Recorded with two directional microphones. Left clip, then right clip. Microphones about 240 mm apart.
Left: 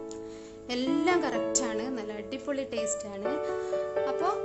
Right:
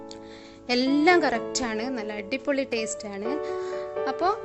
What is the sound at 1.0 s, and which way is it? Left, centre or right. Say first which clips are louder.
Speech: right 7 dB; centre.